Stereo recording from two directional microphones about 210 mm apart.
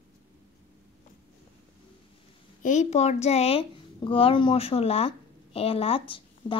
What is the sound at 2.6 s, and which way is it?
Speech, 35° left (ahead or behind).